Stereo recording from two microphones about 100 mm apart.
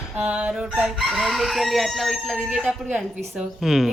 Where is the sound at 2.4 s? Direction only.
10° right (ahead or behind).